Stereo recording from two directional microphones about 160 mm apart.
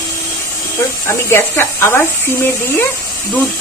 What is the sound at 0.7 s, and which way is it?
Speech, 15° left (ahead or behind).